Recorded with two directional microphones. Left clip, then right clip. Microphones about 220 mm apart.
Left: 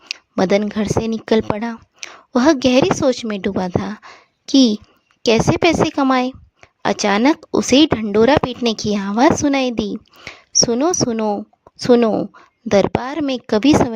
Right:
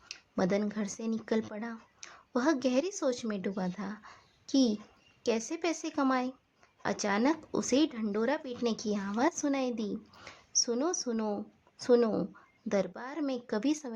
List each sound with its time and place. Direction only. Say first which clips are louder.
0.1 s a woman's voice: left 15 dB; 40° left (ahead or behind)